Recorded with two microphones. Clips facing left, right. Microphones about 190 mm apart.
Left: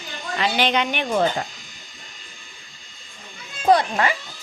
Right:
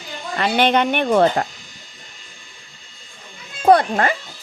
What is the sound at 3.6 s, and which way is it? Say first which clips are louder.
Speech: right 4 dB; 50° right (ahead or behind).